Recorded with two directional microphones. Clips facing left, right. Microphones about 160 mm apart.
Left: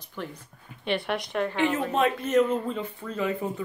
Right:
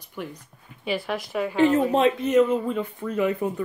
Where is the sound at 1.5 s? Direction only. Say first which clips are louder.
Right 9 dB; 40° right (ahead or behind).